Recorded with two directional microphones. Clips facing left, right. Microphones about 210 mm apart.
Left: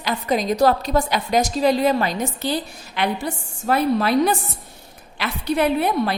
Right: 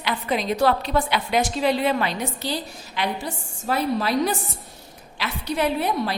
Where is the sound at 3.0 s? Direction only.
60° left (ahead or behind).